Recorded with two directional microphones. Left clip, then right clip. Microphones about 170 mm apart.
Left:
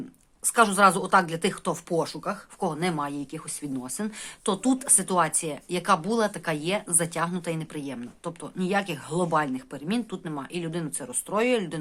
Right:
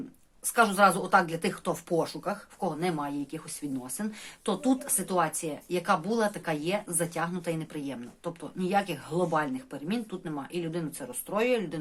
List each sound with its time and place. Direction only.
0.5 s speech: 25° left (ahead or behind)
2.6 s speech: 35° left (ahead or behind)